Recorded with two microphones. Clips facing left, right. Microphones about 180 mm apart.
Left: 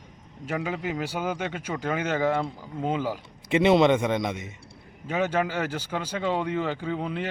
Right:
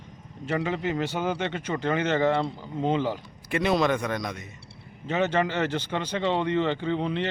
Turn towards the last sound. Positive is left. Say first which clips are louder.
# right 3 dB
turn(degrees=5)  # may be behind; listen again after turning